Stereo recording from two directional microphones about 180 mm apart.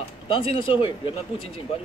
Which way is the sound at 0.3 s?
30° left (ahead or behind).